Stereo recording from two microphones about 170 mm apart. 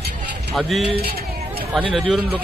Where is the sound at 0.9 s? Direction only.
65° right (ahead or behind).